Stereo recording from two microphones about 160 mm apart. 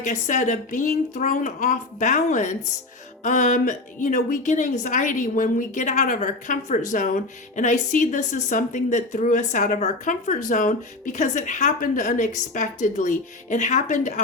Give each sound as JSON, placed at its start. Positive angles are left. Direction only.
{"t": 0.0, "sound": "speech", "side_deg": 50}